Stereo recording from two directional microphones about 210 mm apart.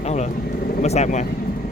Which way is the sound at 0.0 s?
30° left (ahead or behind).